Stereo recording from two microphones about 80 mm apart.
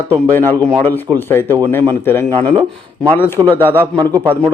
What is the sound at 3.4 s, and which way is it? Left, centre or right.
Speech, right.